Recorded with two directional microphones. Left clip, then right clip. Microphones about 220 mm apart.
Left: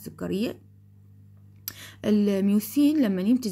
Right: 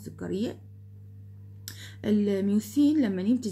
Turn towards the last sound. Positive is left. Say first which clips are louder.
# left 3 dB
turn(degrees=35)  # may be behind; listen again after turning